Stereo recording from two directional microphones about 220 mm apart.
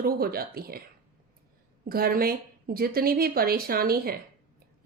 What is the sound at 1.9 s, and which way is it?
A woman's voice, 40° right (ahead or behind).